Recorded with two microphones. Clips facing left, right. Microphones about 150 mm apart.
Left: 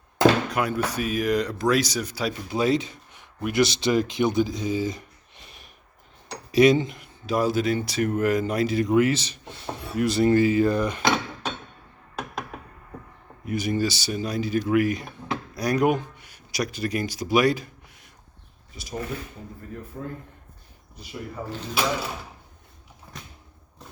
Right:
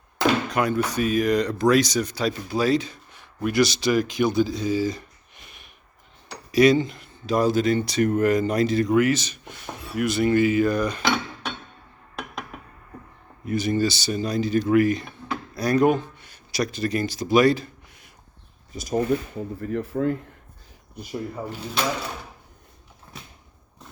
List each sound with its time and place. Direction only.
0.5 s speech: 5° left (ahead or behind)
2.5 s speech: 20° left (ahead or behind)
6.5 s speech: 20° left (ahead or behind); by 8.8 s 5° left (ahead or behind)
8.8 s speech: 25° left (ahead or behind)
13.4 s speech: 10° left (ahead or behind)
18.7 s speech: 45° right (ahead or behind)
19.6 s speech: 90° right
20.9 s speech: 45° right (ahead or behind)
23.1 s cupboard open or close: 5° left (ahead or behind)